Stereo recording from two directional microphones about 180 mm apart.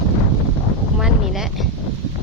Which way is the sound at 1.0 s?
Centre (ahead or behind).